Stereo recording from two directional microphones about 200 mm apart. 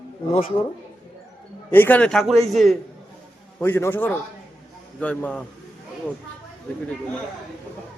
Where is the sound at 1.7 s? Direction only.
10° left (ahead or behind).